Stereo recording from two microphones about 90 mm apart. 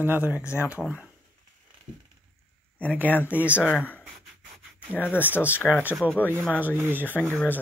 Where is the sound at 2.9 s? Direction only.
20° right (ahead or behind).